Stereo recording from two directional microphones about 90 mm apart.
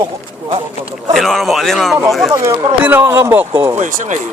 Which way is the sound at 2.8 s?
20° right (ahead or behind).